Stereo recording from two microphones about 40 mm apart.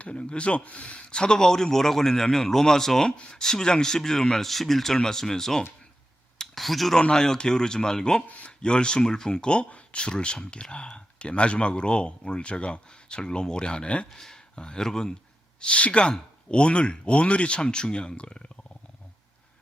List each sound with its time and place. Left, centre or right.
0.0 s a man's voice: left; by 5.6 s centre
6.4 s a sound: centre
7.1 s a man's voice: centre
14.1 s speech: centre
15.6 s speech: left